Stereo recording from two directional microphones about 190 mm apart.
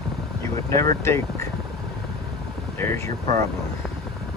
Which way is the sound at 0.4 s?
15° left (ahead or behind).